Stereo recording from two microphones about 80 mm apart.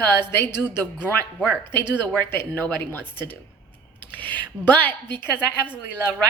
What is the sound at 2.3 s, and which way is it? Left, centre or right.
Speech, left.